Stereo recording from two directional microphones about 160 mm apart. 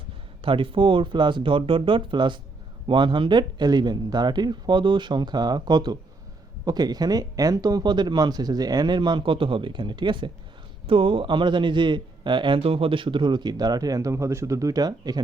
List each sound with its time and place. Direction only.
0.4 s a man's voice: 35° right (ahead or behind)